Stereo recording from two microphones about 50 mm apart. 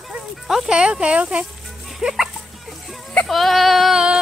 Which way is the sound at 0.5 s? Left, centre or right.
Centre.